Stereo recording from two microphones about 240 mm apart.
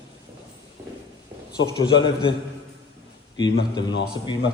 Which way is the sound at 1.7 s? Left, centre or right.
Centre.